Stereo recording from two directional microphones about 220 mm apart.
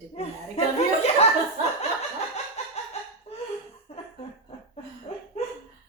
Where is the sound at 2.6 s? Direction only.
30° left (ahead or behind).